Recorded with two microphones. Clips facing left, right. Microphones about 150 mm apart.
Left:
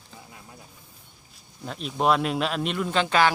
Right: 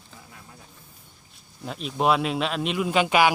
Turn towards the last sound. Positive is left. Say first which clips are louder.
# right 2 dB
turn(degrees=-10)  # may be behind; listen again after turning